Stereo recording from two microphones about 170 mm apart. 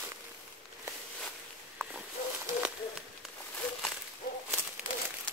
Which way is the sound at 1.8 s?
15° right (ahead or behind).